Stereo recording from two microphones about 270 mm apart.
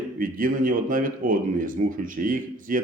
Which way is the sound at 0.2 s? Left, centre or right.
Right.